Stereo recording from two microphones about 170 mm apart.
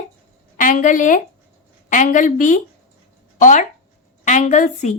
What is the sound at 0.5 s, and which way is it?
A woman's voice, 50° left (ahead or behind).